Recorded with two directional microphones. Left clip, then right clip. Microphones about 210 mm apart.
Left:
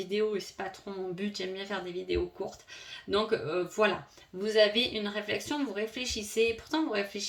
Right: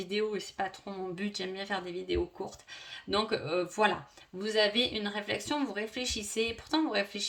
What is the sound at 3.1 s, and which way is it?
Speech, 40° right (ahead or behind).